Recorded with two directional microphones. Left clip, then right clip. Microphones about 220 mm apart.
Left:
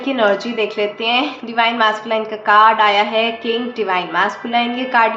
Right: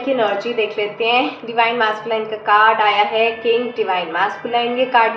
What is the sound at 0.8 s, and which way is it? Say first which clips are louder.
A woman's voice: even; 50° left (ahead or behind).